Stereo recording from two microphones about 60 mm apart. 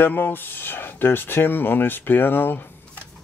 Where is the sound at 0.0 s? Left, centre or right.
Left.